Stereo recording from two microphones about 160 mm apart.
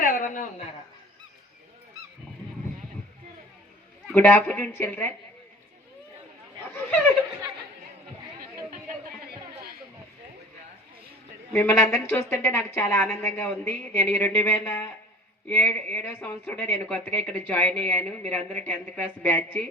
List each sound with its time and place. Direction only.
0.0 s a sound: 55° left (ahead or behind)
4.1 s a woman's voice: 10° left (ahead or behind)
11.5 s a woman's voice: 15° left (ahead or behind)